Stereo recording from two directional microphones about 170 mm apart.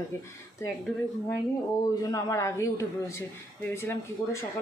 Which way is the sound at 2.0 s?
20° left (ahead or behind).